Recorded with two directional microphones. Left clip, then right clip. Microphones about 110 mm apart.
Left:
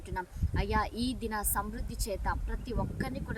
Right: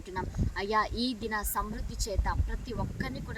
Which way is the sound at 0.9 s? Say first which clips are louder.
Right 2 dB; 55° left (ahead or behind).